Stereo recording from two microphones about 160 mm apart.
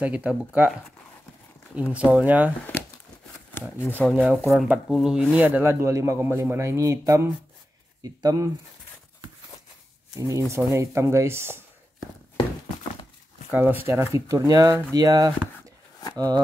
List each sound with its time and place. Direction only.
0.0 s speech: 10° right (ahead or behind)
4.1 s speech: 5° right (ahead or behind); by 8.5 s 25° right (ahead or behind)
10.1 s speech: 20° right (ahead or behind)
13.5 s speech: 10° right (ahead or behind)